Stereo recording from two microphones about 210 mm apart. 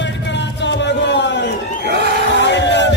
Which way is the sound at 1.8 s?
50° right (ahead or behind).